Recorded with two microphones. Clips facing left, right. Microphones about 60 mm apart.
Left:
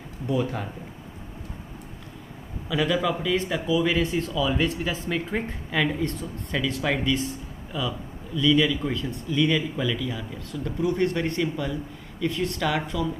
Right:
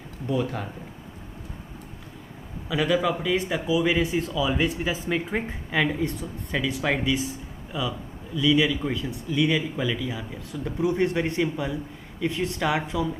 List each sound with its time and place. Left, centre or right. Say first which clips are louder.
0.3 s speech: left 1 dB; centre
2.7 s speech: right 1 dB; centre